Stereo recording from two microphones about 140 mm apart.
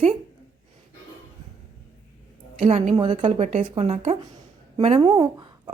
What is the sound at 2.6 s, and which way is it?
Speech, 55° right (ahead or behind).